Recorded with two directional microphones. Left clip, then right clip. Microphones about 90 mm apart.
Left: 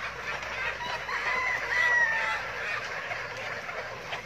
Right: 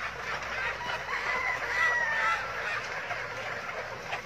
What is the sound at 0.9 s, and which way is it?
Fowl, centre (ahead or behind).